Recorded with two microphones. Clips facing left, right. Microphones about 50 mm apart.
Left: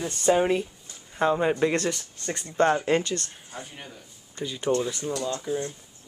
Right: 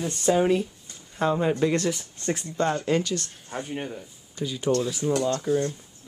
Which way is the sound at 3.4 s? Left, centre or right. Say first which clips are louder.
Right 8 dB; right.